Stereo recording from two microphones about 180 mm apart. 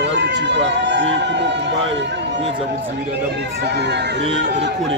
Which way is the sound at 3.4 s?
70° right (ahead or behind).